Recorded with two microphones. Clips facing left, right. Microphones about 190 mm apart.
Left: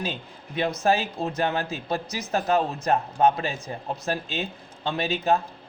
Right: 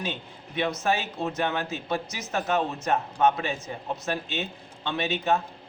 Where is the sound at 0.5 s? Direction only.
35° left (ahead or behind).